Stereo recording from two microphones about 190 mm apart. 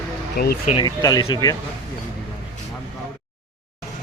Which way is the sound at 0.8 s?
20° left (ahead or behind).